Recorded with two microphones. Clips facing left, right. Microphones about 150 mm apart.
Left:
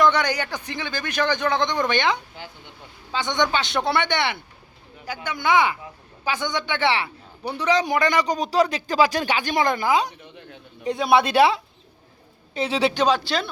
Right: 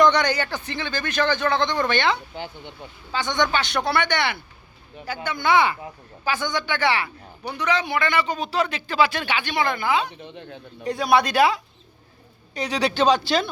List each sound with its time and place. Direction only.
0.0 s a man's voice: 10° left (ahead or behind)
2.3 s speech: 25° right (ahead or behind)
3.1 s speech: 20° left (ahead or behind)
5.0 s a man's voice: 10° left (ahead or behind); by 9.6 s 40° left (ahead or behind)
10.8 s speech: 20° left (ahead or behind)
12.5 s speech: 25° left (ahead or behind)
13.1 s speech: centre (ahead or behind)